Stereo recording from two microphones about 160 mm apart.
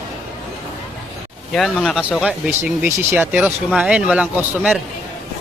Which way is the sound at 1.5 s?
Centre (ahead or behind).